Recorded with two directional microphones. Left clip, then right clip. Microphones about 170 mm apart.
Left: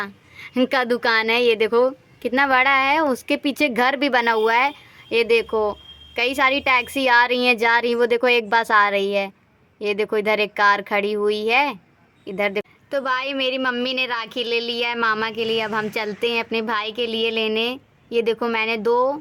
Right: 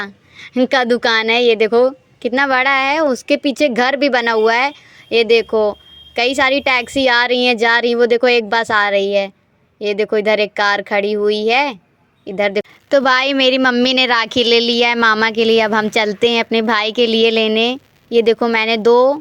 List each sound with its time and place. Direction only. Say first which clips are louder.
0.0 s a woman's voice: right 3 dB; 20° right (ahead or behind)
12.9 s a woman's voice: right 10 dB; 40° right (ahead or behind)